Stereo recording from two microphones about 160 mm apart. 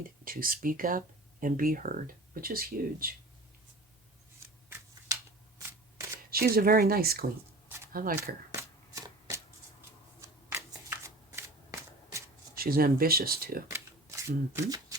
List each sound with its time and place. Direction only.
0.3 s speech: 65° right (ahead or behind)
6.3 s speech: 70° right (ahead or behind)
8.5 s shuffling cards: 20° right (ahead or behind)
12.5 s speech: 65° right (ahead or behind)
13.7 s shuffling cards: 20° right (ahead or behind)